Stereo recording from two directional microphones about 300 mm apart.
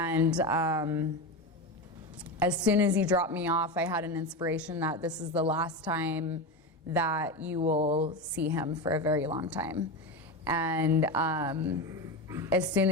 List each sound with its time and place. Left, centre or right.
0.0 s a woman's voice: centre
2.4 s a woman's voice: centre
7.6 s speech: right
8.4 s a woman's voice: centre